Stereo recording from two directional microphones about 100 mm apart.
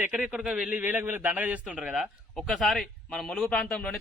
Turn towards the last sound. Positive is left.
turn(degrees=5)  # may be behind; listen again after turning